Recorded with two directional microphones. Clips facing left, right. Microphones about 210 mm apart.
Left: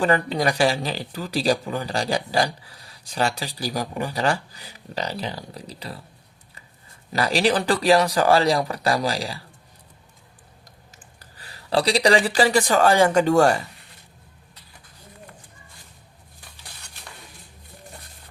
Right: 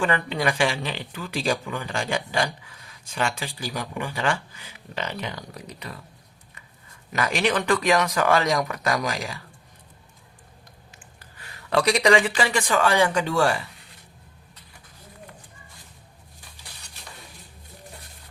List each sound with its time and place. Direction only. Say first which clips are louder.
0.0 s speech: left 3 dB; 40° left (ahead or behind)
7.1 s speech: left 3 dB; 35° left (ahead or behind)
11.2 s speech: even; 35° left (ahead or behind)